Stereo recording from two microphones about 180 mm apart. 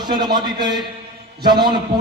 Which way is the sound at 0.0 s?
25° right (ahead or behind).